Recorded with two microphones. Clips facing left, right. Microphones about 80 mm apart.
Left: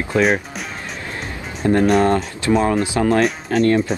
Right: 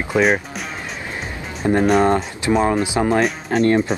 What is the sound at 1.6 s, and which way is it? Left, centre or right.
Speech, centre.